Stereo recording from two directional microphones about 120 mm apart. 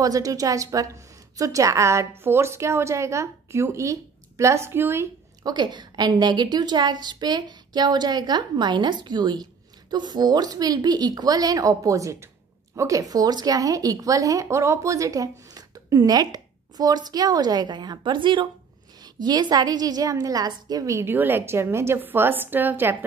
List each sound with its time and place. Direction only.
0.0 s a woman's voice: 30° right (ahead or behind)
5.4 s a woman's voice: 35° right (ahead or behind); by 22.9 s 15° right (ahead or behind)